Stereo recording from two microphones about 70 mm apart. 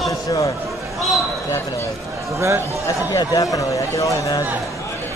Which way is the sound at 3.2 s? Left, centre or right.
Left.